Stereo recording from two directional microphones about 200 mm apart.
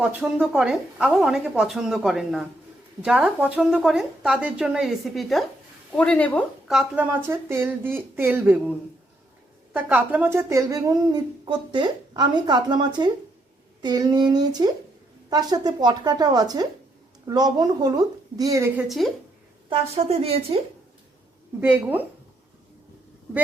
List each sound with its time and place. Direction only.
0.0 s a woman's voice: 5° right (ahead or behind)
9.7 s speech: 10° right (ahead or behind)
18.8 s speech: centre (ahead or behind)
19.7 s speech: 30° right (ahead or behind)
21.6 s a woman's voice: 10° right (ahead or behind)